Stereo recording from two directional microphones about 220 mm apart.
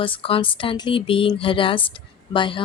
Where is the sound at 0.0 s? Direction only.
25° left (ahead or behind).